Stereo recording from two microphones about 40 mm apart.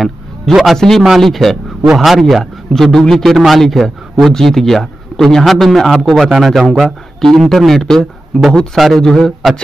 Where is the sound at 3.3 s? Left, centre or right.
Centre.